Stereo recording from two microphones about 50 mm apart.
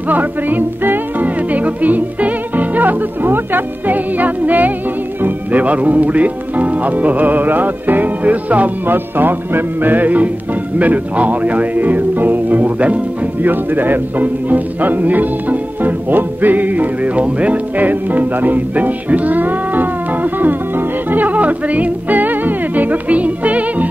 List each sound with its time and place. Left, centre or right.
0.1 s speech: right
8.8 s speech: right